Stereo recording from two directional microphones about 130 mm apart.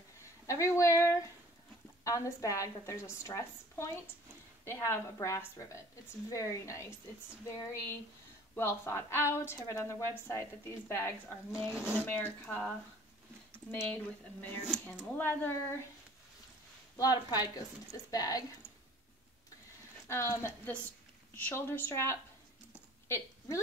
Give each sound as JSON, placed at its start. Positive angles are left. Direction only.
{"t": 0.2, "sound": "a woman's voice", "side_deg": 25}
{"t": 11.7, "sound": "speech", "side_deg": -5}
{"t": 12.0, "sound": "speech", "side_deg": 15}
{"t": 16.9, "sound": "a woman's voice", "side_deg": 30}
{"t": 20.1, "sound": "a woman's voice", "side_deg": 20}
{"t": 23.0, "sound": "a sound", "side_deg": 20}